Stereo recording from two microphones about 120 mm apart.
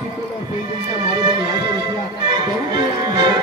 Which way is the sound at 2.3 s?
40° right (ahead or behind).